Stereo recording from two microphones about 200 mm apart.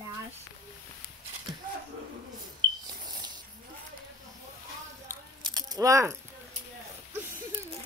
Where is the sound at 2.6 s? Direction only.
80° right.